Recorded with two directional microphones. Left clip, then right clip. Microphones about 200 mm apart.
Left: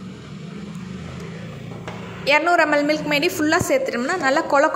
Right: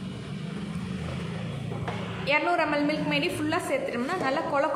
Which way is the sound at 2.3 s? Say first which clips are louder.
Left 8 dB; 25° left (ahead or behind).